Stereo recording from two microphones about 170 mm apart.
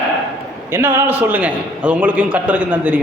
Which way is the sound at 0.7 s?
15° right (ahead or behind).